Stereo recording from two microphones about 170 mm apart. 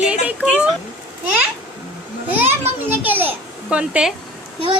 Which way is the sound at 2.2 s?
10° right (ahead or behind).